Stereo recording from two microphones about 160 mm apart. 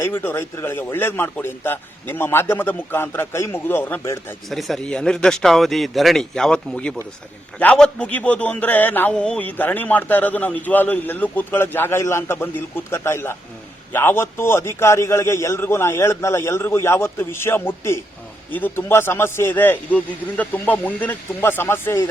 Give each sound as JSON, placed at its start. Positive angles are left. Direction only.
{"t": 0.0, "sound": "speech", "side_deg": 15}
{"t": 4.4, "sound": "a man's voice", "side_deg": 0}